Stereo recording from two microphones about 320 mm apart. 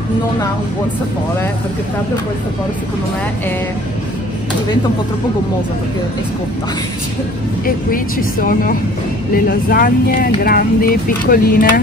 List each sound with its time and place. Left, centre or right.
9.3 s speech: left